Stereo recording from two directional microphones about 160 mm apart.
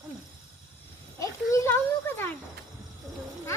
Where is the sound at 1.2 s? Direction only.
20° left (ahead or behind).